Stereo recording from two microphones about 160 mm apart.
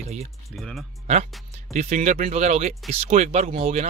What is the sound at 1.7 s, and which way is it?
Speech, 50° right (ahead or behind).